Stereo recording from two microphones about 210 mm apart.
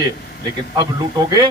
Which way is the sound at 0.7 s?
20° right (ahead or behind).